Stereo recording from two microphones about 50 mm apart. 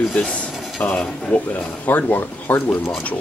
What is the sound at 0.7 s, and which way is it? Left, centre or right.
Speech, left.